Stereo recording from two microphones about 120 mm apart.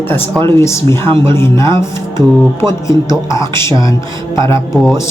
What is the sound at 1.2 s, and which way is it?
Speech, 20° left (ahead or behind).